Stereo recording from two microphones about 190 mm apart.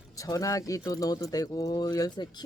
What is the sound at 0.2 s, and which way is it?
Speech, 15° left (ahead or behind).